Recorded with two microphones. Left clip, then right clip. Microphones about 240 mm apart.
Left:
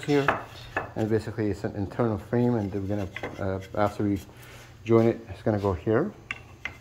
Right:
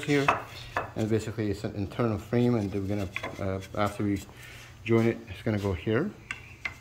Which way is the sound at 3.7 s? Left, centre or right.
Centre.